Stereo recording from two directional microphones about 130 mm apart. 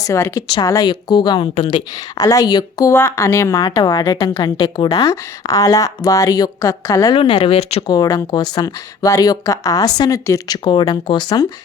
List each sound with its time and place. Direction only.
0.0 s speech: 20° left (ahead or behind)
7.2 s speech: 45° left (ahead or behind)
7.9 s speech: 30° left (ahead or behind)
10.6 s speech: 35° left (ahead or behind)